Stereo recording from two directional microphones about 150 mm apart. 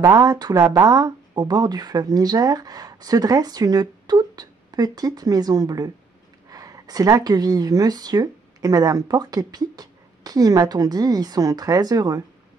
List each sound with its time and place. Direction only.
0.2 s speech: 25° right (ahead or behind)